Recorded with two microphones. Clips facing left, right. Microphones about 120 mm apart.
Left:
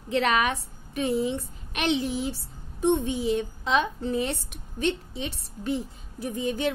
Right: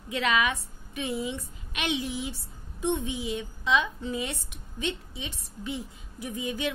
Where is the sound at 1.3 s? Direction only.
35° left (ahead or behind).